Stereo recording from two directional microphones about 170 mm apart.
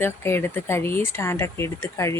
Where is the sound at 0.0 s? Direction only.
15° left (ahead or behind).